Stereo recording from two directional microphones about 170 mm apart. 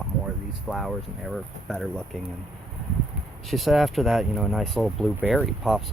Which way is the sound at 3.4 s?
Centre (ahead or behind).